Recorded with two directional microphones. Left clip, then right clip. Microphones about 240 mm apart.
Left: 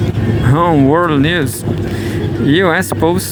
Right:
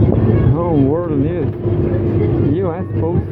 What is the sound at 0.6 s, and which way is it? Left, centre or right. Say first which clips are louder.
Speech: left 8 dB; left.